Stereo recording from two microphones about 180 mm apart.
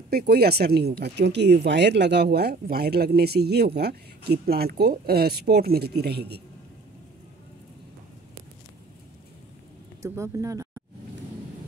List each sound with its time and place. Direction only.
0.1 s speech: 60° right (ahead or behind)
10.0 s speech: 15° right (ahead or behind)